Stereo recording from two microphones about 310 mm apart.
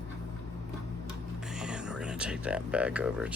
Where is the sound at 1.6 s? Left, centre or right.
Centre.